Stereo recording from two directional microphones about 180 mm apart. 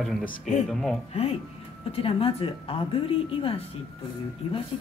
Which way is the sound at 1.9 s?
30° left (ahead or behind).